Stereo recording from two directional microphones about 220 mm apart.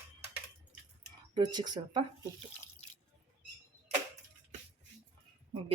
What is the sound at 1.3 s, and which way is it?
Speech, 20° right (ahead or behind).